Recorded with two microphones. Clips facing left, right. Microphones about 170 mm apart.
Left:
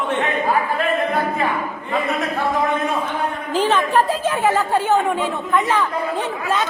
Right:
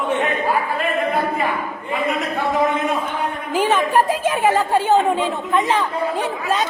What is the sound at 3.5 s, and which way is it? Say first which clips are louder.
A woman's voice: right 1 dB; 10° right (ahead or behind).